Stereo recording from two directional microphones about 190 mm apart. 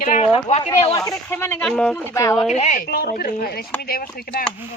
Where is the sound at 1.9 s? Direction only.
15° left (ahead or behind).